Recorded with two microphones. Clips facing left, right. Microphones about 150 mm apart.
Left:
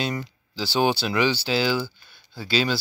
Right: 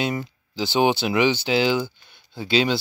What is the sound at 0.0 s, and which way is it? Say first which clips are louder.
Speech: right 3 dB; 20° right (ahead or behind).